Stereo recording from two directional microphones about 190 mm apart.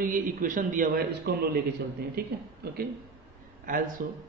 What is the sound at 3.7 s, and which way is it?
Speech, 45° right (ahead or behind).